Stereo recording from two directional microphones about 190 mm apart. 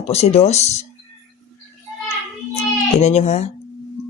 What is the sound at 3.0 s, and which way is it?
Speech, 35° left (ahead or behind).